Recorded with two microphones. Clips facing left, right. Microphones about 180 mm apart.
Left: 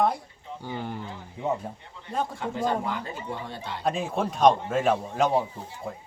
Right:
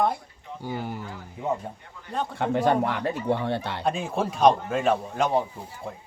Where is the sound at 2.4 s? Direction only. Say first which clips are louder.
Right 9 dB; 65° right (ahead or behind).